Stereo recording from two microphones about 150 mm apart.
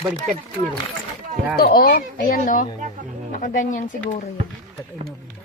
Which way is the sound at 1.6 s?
90° left.